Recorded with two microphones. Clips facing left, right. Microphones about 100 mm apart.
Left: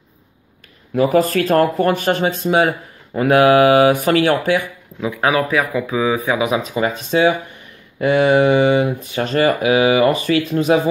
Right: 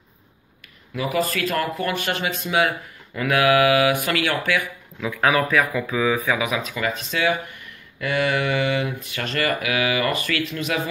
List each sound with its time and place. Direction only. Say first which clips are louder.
0.9 s speech: left 9 dB; 45° left (ahead or behind)
5.1 s speech: left 2 dB; 15° left (ahead or behind); by 10.8 s 35° left (ahead or behind)